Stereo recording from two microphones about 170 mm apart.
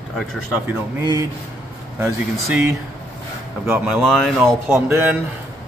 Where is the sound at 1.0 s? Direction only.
15° right (ahead or behind).